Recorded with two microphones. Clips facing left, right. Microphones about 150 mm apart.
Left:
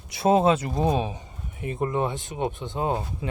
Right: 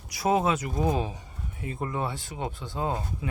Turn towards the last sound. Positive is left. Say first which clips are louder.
# left 3 dB
turn(degrees=20)  # may be behind; listen again after turning